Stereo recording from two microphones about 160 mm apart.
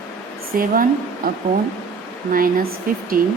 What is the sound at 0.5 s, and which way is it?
A woman's voice, 60° right (ahead or behind).